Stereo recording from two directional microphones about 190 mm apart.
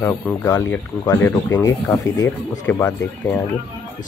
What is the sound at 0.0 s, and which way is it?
Speech, 15° left (ahead or behind).